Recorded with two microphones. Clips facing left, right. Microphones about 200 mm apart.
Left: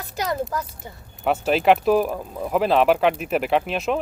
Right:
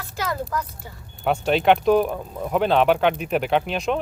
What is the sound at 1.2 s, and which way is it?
Speech, 5° left (ahead or behind).